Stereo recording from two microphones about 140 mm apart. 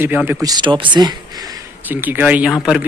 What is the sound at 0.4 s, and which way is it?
Speech, 30° right (ahead or behind).